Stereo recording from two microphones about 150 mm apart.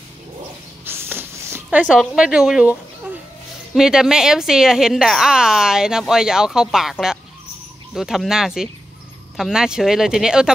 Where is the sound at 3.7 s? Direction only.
5° right (ahead or behind).